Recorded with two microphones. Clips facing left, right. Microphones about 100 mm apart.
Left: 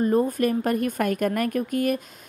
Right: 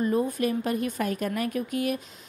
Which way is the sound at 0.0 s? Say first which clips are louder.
Left 4 dB; 45° left (ahead or behind).